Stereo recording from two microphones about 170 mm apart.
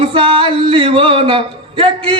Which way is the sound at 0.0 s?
30° right (ahead or behind).